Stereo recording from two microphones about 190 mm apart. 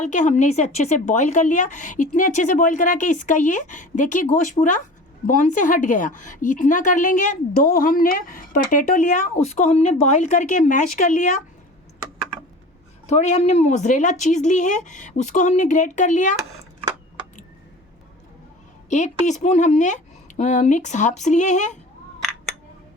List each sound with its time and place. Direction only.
0.0 s a woman's voice: 40° left (ahead or behind)
13.1 s a woman's voice: 35° left (ahead or behind)
18.9 s a woman's voice: 40° left (ahead or behind)